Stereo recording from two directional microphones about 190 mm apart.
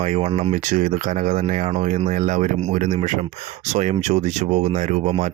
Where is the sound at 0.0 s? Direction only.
35° right (ahead or behind).